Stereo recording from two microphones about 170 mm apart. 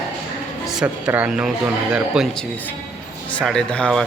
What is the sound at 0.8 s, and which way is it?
A man's voice, 5° right (ahead or behind).